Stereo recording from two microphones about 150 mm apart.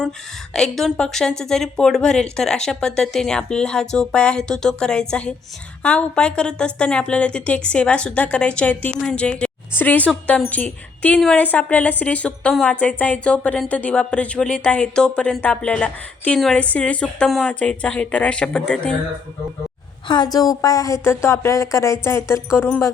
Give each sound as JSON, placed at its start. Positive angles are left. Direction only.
{"t": 0.5, "sound": "a woman's voice", "side_deg": 5}
{"t": 20.1, "sound": "a woman's voice", "side_deg": 25}